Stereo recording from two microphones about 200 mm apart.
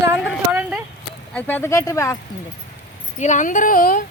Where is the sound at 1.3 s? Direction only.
10° left (ahead or behind).